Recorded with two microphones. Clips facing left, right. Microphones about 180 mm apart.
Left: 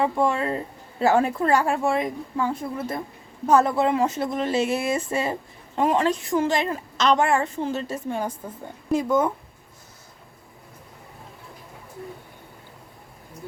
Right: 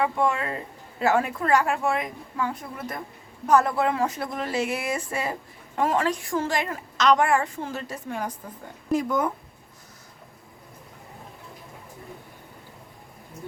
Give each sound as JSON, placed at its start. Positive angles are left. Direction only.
{"t": 0.0, "sound": "a woman's voice", "side_deg": 30}